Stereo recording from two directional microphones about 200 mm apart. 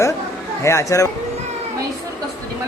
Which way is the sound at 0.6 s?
15° left (ahead or behind).